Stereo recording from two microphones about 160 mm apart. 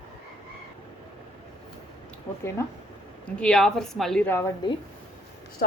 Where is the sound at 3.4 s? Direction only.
5° left (ahead or behind).